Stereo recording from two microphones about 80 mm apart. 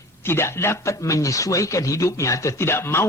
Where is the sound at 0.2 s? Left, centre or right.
Left.